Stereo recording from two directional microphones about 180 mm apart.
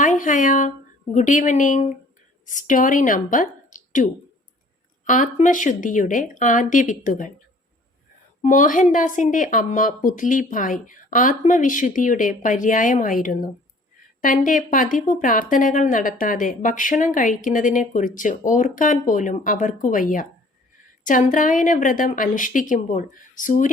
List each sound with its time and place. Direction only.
0.0 s a woman's voice: 45° left (ahead or behind)